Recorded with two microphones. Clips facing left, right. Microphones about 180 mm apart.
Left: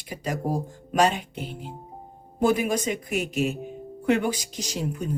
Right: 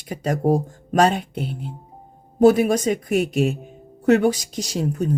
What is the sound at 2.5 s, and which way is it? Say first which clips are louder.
Speech: right 7 dB; 45° right (ahead or behind).